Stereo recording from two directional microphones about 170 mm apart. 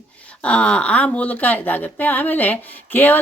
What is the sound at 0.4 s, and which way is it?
Speech, 5° left (ahead or behind).